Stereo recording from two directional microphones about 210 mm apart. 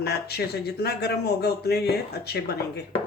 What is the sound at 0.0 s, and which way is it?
Speech, 50° left (ahead or behind).